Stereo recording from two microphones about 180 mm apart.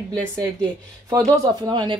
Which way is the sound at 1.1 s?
20° right (ahead or behind).